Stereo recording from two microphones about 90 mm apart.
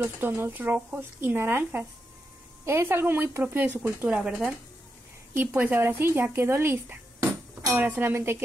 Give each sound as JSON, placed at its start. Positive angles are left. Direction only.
{"t": 0.3, "sound": "speech", "side_deg": -25}
{"t": 4.3, "sound": "speech", "side_deg": 0}
{"t": 5.3, "sound": "speech", "side_deg": -20}